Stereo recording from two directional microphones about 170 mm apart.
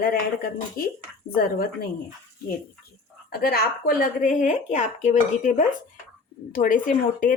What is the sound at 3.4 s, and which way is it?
Speech, 60° left (ahead or behind).